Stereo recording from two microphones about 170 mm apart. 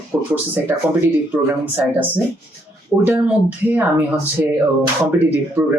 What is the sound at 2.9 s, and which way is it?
Speech, centre (ahead or behind).